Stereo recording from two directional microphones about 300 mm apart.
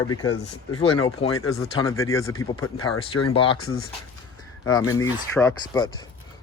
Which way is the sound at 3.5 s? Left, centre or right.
Left.